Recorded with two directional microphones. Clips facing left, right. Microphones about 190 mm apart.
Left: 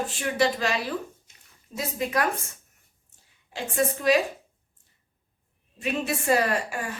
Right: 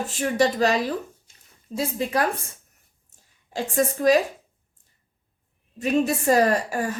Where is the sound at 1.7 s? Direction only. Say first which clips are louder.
Right 3 dB; 30° right (ahead or behind).